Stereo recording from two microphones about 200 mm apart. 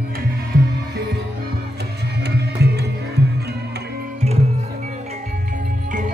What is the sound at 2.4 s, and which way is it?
Music, 55° right (ahead or behind).